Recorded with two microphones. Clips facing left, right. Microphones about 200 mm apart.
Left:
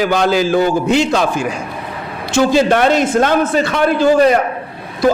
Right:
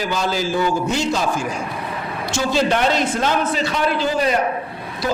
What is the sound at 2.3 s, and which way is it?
A man's voice, 55° left (ahead or behind).